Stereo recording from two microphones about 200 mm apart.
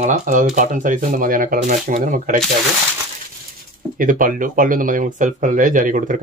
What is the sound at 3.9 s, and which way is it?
Speech, 40° right (ahead or behind).